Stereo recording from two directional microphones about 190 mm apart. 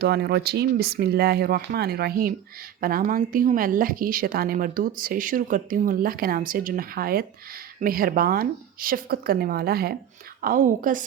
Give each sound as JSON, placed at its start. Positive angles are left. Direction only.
{"t": 0.0, "sound": "a woman's voice", "side_deg": -60}